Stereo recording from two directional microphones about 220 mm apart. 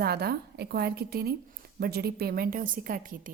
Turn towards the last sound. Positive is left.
turn(degrees=-40)  # may be behind; listen again after turning